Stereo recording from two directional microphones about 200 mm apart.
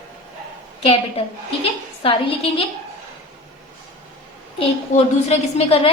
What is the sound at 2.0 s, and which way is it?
Speech, 25° left (ahead or behind).